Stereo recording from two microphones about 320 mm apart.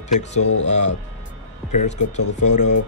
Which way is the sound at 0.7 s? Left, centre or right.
Left.